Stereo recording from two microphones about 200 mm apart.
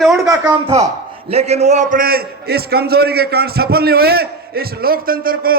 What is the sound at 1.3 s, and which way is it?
A man's voice, 30° right (ahead or behind).